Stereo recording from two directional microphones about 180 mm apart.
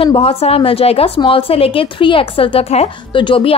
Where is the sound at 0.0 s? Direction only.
35° left (ahead or behind).